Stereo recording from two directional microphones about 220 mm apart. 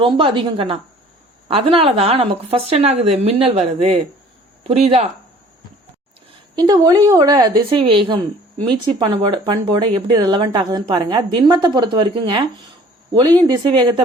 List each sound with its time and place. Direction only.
0.0 s speech: 20° right (ahead or behind)
6.6 s speech: 15° right (ahead or behind)
13.5 s speech: 20° right (ahead or behind)